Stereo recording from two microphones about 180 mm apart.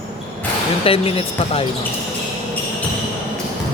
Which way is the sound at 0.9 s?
30° left (ahead or behind).